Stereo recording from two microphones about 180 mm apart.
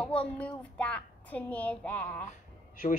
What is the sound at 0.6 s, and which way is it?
A woman's voice, 5° left (ahead or behind).